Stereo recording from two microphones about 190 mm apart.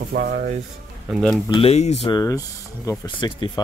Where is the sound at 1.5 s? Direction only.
30° left (ahead or behind).